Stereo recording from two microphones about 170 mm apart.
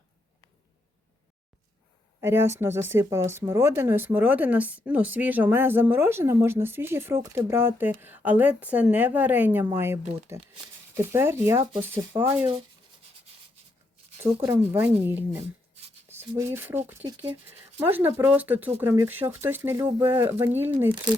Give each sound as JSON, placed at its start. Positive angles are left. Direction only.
{"t": 2.2, "sound": "speech", "side_deg": -15}
{"t": 14.4, "sound": "speech", "side_deg": -15}